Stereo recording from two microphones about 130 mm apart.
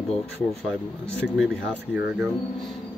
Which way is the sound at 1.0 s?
10° left (ahead or behind).